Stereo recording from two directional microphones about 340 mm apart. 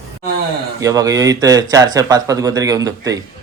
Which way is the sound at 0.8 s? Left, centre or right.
Centre.